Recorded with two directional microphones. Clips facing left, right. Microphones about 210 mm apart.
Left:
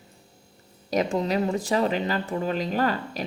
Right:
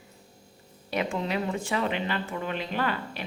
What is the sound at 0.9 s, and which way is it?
Speech, 40° left (ahead or behind).